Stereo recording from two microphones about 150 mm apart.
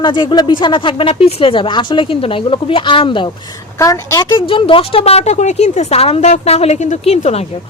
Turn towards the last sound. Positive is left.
turn(degrees=45)  # may be behind; listen again after turning